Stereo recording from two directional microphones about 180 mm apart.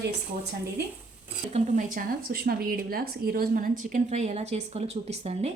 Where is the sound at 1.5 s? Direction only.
45° right (ahead or behind).